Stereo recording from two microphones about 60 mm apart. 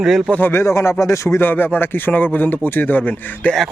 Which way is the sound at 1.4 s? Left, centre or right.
Left.